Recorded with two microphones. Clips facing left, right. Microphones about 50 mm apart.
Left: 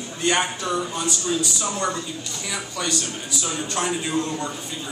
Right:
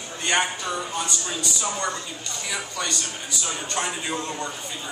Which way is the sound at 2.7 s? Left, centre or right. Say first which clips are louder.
Left 2 dB; centre.